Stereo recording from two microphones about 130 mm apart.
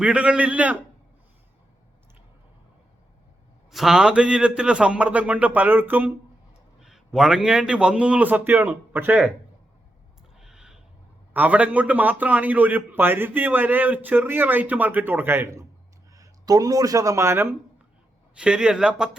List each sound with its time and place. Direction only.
0.0 s a man's voice: 10° right (ahead or behind)
3.7 s a man's voice: centre (ahead or behind)
6.7 s a man's voice: 5° right (ahead or behind)
10.3 s a sound: 5° right (ahead or behind)
11.3 s a man's voice: 10° right (ahead or behind)
18.3 s a man's voice: 5° right (ahead or behind)